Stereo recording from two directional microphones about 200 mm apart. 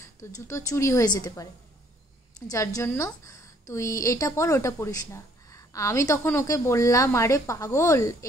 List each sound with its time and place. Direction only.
0.0 s a woman's voice: 15° left (ahead or behind)